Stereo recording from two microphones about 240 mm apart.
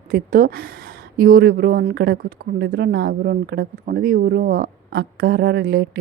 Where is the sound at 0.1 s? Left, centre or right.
Right.